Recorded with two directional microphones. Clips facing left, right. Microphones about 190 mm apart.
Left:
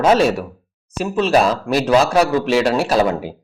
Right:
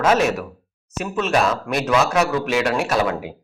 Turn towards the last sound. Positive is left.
turn(degrees=30)  # may be behind; listen again after turning